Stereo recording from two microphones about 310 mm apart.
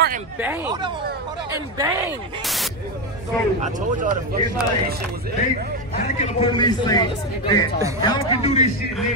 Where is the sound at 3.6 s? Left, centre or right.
Right.